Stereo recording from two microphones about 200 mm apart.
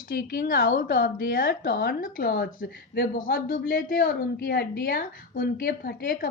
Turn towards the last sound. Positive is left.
turn(degrees=50)  # may be behind; listen again after turning